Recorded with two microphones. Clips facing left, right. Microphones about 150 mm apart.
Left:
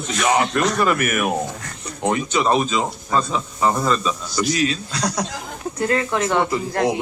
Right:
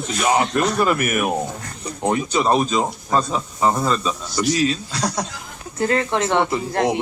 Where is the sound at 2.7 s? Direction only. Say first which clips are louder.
Right 1 dB; 40° right (ahead or behind).